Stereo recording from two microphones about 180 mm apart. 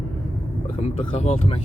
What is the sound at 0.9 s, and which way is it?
Speech, 40° left (ahead or behind).